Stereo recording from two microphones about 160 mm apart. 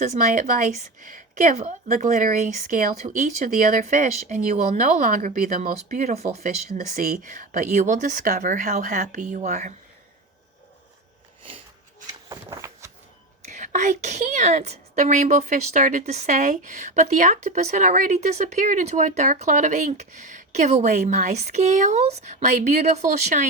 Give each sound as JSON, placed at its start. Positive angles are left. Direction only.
{"t": 0.0, "sound": "a woman's voice", "side_deg": -50}
{"t": 12.3, "sound": "a sound", "side_deg": -20}
{"t": 13.5, "sound": "a woman's voice", "side_deg": -50}